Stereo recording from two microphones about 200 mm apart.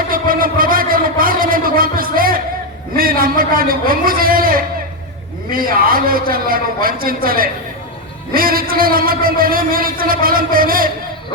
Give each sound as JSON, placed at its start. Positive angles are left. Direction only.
{"t": 0.1, "sound": "a man's voice", "side_deg": -45}